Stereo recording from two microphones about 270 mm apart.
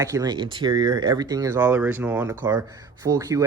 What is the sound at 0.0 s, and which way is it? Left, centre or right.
Speech, centre.